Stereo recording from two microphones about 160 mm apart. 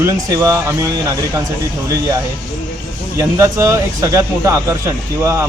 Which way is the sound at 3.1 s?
20° right (ahead or behind).